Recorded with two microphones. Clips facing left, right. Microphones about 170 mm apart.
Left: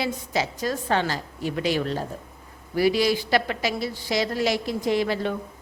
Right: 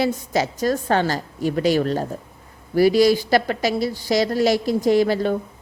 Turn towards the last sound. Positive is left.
turn(degrees=-40)  # may be behind; listen again after turning